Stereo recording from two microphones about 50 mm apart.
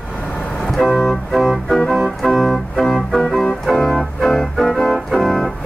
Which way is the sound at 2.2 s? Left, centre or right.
Centre.